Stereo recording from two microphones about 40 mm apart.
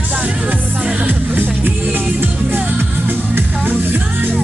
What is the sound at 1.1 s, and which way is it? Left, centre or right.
Music, right.